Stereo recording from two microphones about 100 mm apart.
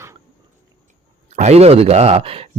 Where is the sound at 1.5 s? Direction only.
90° right; by 2.4 s 70° right (ahead or behind).